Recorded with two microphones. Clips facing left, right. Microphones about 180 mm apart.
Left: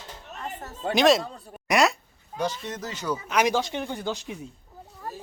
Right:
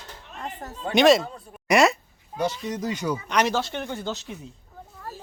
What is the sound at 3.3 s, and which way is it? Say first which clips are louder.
Speech: left 1 dB; 10° left (ahead or behind).